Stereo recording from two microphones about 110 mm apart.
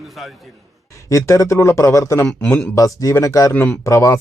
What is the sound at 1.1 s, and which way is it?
Speech, 30° left (ahead or behind).